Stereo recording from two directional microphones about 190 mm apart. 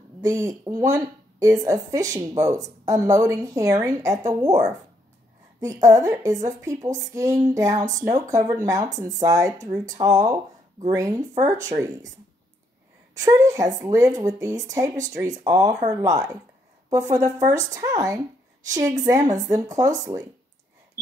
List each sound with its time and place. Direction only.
0.2 s a woman's voice: 15° right (ahead or behind)
13.2 s a woman's voice: 15° right (ahead or behind)